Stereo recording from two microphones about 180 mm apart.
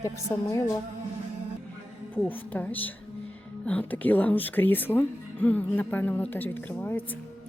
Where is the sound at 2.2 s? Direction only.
10° left (ahead or behind).